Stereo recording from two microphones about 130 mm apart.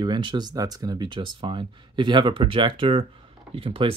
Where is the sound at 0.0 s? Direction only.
35° right (ahead or behind).